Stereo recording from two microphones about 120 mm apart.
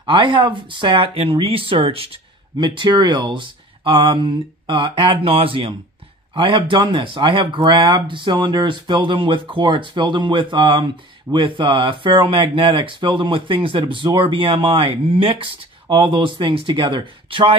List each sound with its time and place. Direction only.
0.0 s speech: 45° right (ahead or behind)